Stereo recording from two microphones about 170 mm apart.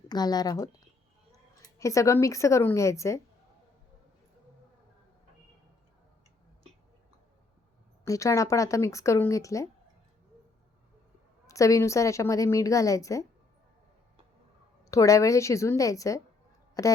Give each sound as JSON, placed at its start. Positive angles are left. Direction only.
{"t": 0.1, "sound": "a woman's voice", "side_deg": 25}
{"t": 1.8, "sound": "a woman's voice", "side_deg": 20}
{"t": 8.0, "sound": "a woman's voice", "side_deg": 20}
{"t": 11.4, "sound": "a woman's voice", "side_deg": 20}
{"t": 14.8, "sound": "a woman's voice", "side_deg": 20}